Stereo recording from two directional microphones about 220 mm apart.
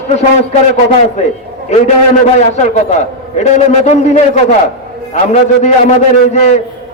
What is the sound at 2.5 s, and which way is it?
A man's voice, 30° left (ahead or behind).